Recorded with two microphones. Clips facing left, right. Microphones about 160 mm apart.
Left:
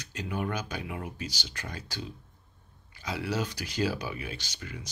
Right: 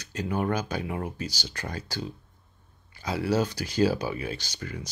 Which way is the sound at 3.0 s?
35° right (ahead or behind).